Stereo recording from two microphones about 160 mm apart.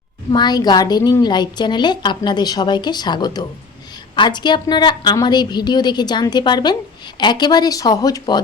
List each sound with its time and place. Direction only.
0.3 s a woman's voice: 25° left (ahead or behind)